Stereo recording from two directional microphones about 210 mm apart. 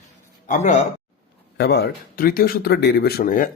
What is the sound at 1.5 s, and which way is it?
Speech, 50° left (ahead or behind).